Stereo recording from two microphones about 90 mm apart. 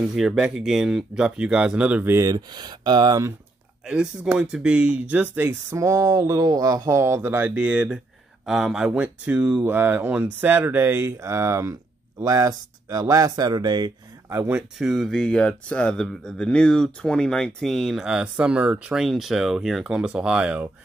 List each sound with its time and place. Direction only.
0.1 s speech: 5° right (ahead or behind)
2.0 s speech: 30° right (ahead or behind)
2.3 s speech: 50° right (ahead or behind)
3.8 s speech: 10° right (ahead or behind)
5.8 s speech: 35° right (ahead or behind); by 13.9 s 55° right (ahead or behind)
14.3 s speech: 30° right (ahead or behind)
14.8 s speech: centre (ahead or behind); by 18.9 s 15° right (ahead or behind)
18.9 s speech: 5° right (ahead or behind)